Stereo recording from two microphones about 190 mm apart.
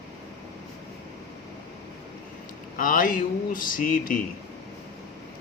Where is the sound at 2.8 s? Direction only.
45° left (ahead or behind).